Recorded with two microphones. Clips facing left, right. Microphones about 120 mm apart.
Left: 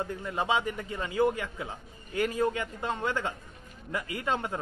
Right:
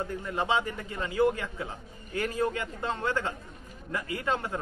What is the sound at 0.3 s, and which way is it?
A man's voice, 15° left (ahead or behind).